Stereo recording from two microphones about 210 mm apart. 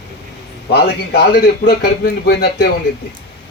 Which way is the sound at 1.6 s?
50° left (ahead or behind).